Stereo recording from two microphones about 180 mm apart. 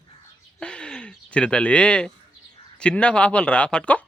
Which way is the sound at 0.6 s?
5° left (ahead or behind).